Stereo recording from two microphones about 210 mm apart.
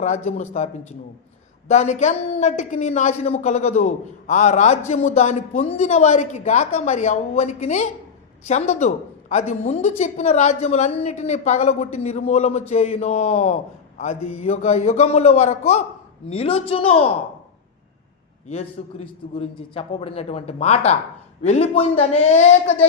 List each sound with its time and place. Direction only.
0.3 s a woman's voice: 30° left (ahead or behind)
18.4 s a man's voice: 30° left (ahead or behind)